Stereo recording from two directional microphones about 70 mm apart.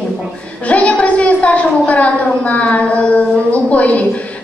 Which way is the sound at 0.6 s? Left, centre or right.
Centre.